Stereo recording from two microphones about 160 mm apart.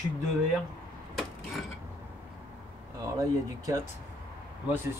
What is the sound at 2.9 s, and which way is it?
Speech, 20° right (ahead or behind).